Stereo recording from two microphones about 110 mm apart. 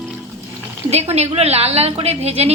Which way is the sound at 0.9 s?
75° right (ahead or behind).